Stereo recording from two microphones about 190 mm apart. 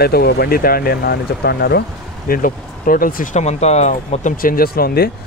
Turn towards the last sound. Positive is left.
turn(degrees=55)  # may be behind; listen again after turning